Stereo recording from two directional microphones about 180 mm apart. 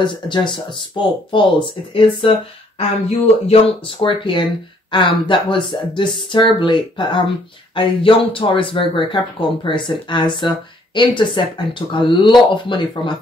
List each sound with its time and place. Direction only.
0.0 s speech: 25° left (ahead or behind)
3.2 s speech: 35° left (ahead or behind)